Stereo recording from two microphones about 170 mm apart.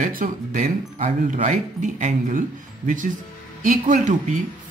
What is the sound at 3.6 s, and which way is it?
Speech, 50° right (ahead or behind).